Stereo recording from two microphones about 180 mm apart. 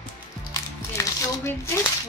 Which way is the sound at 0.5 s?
15° left (ahead or behind).